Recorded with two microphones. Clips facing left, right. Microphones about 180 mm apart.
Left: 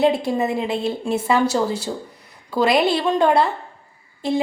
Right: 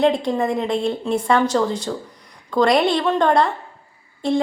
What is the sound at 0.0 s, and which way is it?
A woman's voice, 5° left (ahead or behind).